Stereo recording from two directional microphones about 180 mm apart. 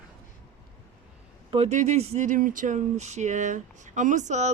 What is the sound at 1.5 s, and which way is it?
Speech, 40° right (ahead or behind).